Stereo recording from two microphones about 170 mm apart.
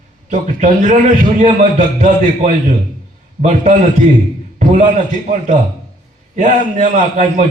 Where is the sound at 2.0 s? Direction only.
45° right (ahead or behind).